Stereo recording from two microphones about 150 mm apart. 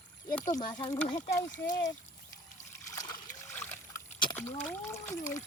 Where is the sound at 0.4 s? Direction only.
60° left (ahead or behind).